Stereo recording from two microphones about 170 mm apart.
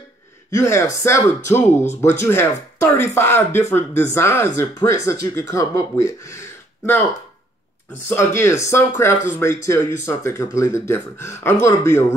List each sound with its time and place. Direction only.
0.5 s speech: 15° left (ahead or behind)
8.1 s speech: 15° left (ahead or behind)